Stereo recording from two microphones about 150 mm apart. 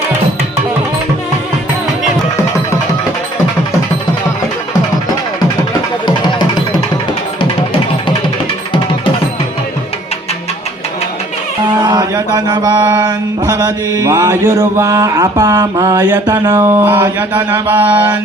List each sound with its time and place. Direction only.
11.8 s mantra: 25° right (ahead or behind)